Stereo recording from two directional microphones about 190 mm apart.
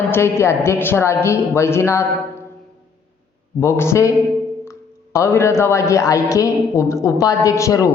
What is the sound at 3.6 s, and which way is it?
Speech, 15° left (ahead or behind).